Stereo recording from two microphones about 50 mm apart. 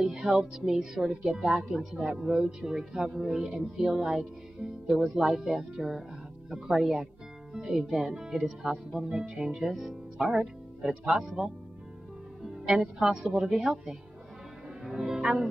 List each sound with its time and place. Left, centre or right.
0.0 s speech: centre
12.7 s speech: centre
14.8 s speech: centre